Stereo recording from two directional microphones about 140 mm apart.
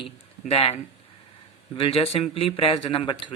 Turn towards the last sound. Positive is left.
turn(degrees=35)  # may be behind; listen again after turning